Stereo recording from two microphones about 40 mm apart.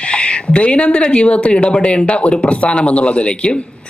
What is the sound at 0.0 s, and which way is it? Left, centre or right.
Speech, left.